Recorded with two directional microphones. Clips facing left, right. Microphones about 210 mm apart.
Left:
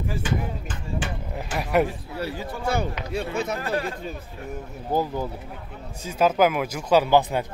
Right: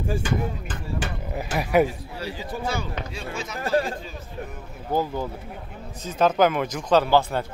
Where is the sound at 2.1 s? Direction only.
60° left (ahead or behind).